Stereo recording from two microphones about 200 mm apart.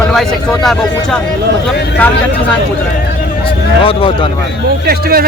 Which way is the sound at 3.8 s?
25° left (ahead or behind).